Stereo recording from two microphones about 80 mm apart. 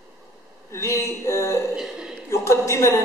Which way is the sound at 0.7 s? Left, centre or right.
Left.